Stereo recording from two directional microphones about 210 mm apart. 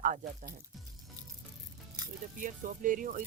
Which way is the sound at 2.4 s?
40° right (ahead or behind).